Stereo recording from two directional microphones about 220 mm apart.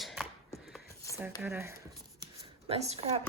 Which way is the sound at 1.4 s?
10° right (ahead or behind).